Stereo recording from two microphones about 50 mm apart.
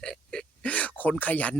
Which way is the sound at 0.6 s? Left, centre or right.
Left.